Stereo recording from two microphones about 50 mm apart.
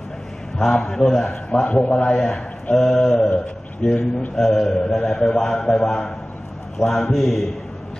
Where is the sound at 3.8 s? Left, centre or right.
Left.